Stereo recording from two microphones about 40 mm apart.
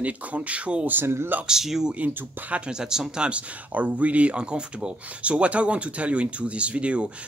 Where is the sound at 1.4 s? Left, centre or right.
Centre.